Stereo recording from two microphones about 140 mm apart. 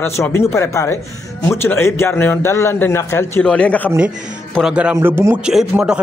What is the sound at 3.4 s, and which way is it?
Speech, 10° left (ahead or behind).